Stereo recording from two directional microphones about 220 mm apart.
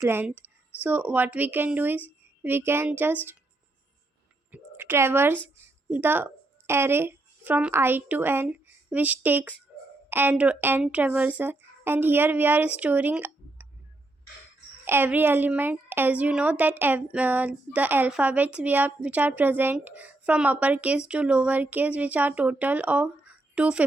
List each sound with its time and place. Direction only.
0.0 s a woman's voice: 10° right (ahead or behind)
4.5 s a woman's voice: 10° right (ahead or behind)
14.8 s a woman's voice: 10° right (ahead or behind)